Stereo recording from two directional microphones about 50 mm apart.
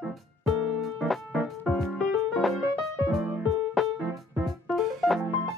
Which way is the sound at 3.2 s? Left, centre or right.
Right.